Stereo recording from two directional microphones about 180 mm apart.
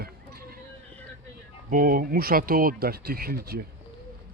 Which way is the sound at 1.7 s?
50° right (ahead or behind).